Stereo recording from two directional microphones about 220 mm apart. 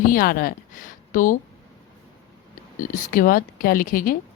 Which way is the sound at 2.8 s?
40° left (ahead or behind).